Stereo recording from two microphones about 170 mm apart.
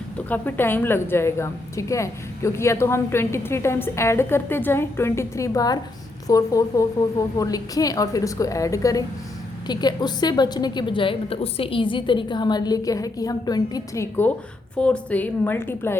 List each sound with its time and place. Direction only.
0.3 s a woman's voice: 10° left (ahead or behind)
14.8 s a woman's voice: 5° left (ahead or behind)